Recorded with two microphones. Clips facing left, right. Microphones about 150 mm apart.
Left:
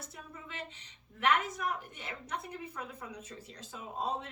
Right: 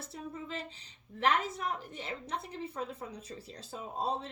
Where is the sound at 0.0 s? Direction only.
30° right (ahead or behind).